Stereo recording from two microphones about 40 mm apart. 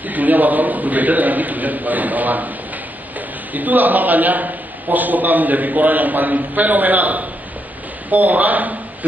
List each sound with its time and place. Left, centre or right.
0.0 s a man's voice: right